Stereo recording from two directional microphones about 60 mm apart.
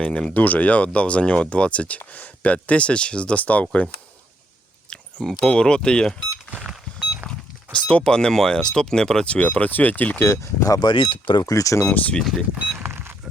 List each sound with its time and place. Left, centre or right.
0.0 s speech: centre
4.9 s a sound: centre
5.5 s speech: centre
6.7 s a sound: centre
7.3 s speech: centre
10.2 s speech: left
11.3 s speech: left
11.9 s speech: left
12.2 s speech: centre
12.8 s a sound: right